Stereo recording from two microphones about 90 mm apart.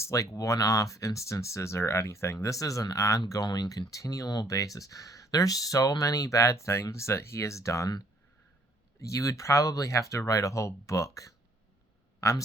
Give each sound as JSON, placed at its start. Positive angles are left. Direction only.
{"t": 0.0, "sound": "speech", "side_deg": 35}
{"t": 3.4, "sound": "speech", "side_deg": 50}
{"t": 9.0, "sound": "speech", "side_deg": 35}